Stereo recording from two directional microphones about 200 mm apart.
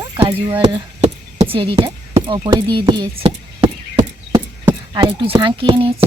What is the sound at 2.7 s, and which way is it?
Speech, 25° right (ahead or behind).